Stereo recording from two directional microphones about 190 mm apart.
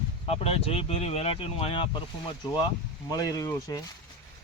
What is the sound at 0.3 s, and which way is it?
Speech, 30° left (ahead or behind).